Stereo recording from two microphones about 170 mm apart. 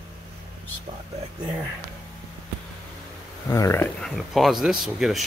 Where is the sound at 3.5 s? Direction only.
15° left (ahead or behind).